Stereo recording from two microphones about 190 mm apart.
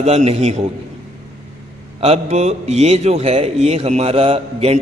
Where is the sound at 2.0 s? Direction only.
35° right (ahead or behind).